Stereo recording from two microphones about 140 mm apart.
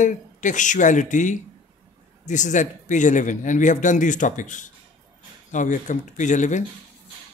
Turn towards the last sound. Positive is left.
turn(degrees=60)  # may be behind; listen again after turning